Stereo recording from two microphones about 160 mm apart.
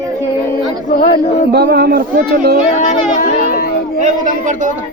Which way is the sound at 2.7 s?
50° left (ahead or behind).